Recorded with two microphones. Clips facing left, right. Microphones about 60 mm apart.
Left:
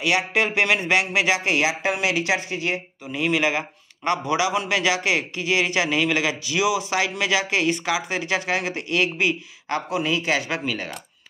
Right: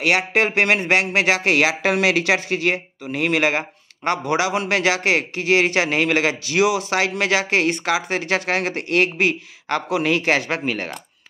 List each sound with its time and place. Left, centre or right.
0.0 s speech: right